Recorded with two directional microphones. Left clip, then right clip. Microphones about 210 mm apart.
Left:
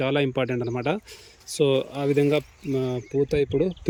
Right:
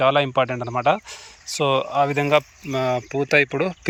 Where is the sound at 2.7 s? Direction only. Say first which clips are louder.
Right 4 dB; 30° right (ahead or behind).